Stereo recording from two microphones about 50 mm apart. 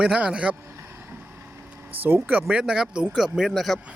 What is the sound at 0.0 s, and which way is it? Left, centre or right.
Speech, centre.